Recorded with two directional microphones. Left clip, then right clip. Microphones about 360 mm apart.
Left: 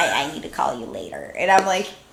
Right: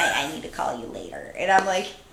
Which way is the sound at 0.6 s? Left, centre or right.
Centre.